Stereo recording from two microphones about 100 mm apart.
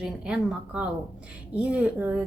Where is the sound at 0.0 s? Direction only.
10° right (ahead or behind).